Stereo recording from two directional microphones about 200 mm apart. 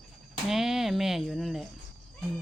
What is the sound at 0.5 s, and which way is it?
Speech, centre (ahead or behind).